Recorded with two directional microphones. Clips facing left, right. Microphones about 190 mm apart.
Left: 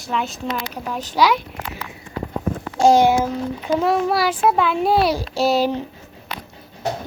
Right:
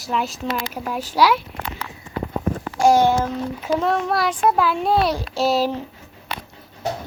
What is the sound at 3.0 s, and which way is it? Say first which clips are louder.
A child's voice: left 2 dB; 10° left (ahead or behind).